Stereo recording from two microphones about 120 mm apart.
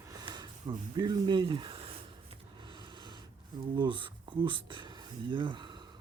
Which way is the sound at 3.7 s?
40° right (ahead or behind).